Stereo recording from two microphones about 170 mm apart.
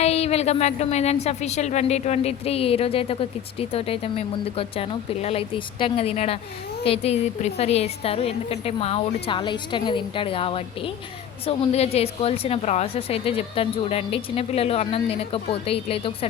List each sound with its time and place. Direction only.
0.0 s a woman's voice: 40° left (ahead or behind)